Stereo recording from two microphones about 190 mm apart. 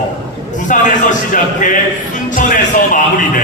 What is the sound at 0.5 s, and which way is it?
A man's voice, 40° left (ahead or behind).